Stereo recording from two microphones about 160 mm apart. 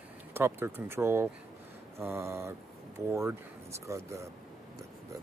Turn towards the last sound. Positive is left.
turn(degrees=-20)  # may be behind; listen again after turning